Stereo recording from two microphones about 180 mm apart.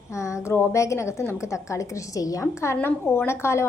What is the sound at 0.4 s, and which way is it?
A woman's voice, 15° left (ahead or behind).